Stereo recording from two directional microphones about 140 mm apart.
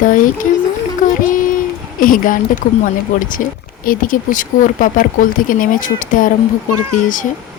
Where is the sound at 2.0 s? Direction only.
80° left.